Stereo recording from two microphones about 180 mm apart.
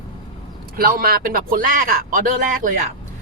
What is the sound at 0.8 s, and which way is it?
Speech, 55° right (ahead or behind).